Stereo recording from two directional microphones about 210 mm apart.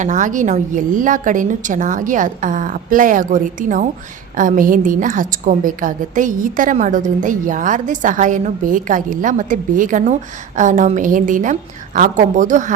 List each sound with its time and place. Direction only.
0.0 s a woman's voice: 35° right (ahead or behind)